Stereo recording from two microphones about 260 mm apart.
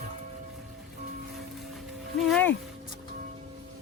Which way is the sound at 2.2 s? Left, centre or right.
Centre.